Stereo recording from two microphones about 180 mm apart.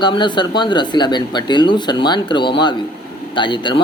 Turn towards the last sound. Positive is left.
turn(degrees=25)  # may be behind; listen again after turning